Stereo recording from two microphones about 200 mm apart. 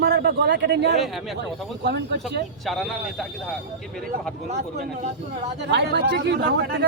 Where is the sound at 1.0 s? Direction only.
Centre (ahead or behind).